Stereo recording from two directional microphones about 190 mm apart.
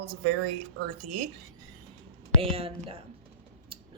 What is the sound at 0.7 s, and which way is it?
Speech, 45° right (ahead or behind).